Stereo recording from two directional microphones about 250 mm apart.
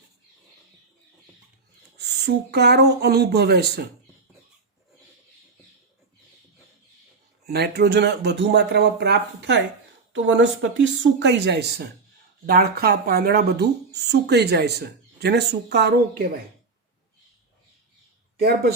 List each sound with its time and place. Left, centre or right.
2.0 s speech: right
7.4 s speech: right
18.3 s speech: right